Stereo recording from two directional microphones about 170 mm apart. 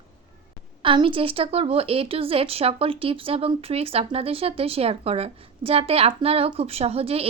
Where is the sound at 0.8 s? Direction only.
30° right (ahead or behind).